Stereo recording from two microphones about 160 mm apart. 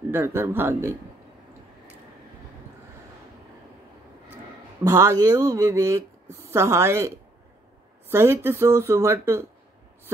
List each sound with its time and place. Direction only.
0.1 s speech: 15° right (ahead or behind)
4.8 s speech: 20° right (ahead or behind)